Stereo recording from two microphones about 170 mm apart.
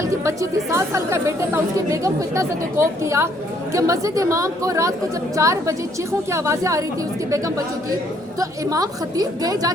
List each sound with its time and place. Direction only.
0.0 s a woman's voice: 15° right (ahead or behind)